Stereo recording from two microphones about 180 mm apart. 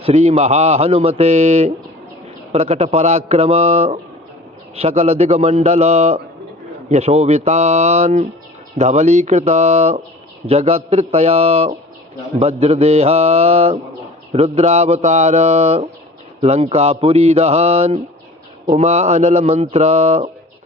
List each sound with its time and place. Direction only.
0.0 s a man's voice: 40° right (ahead or behind)